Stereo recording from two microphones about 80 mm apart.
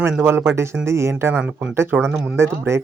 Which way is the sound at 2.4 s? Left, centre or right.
Right.